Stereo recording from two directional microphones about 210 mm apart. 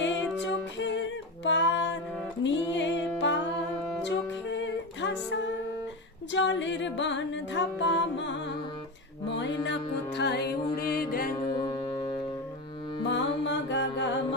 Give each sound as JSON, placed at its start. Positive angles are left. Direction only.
{"t": 0.0, "sound": "music", "side_deg": 60}
{"t": 11.6, "sound": "music", "side_deg": 20}
{"t": 13.1, "sound": "music", "side_deg": 60}